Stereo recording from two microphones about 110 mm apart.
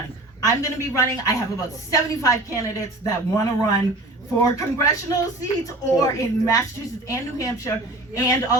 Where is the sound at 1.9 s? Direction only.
30° left (ahead or behind).